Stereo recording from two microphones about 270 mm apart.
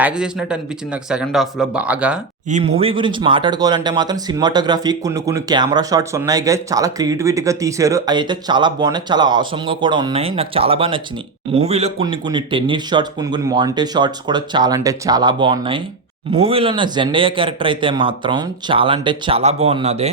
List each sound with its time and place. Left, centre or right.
0.0 s speech: centre
2.5 s a man's voice: right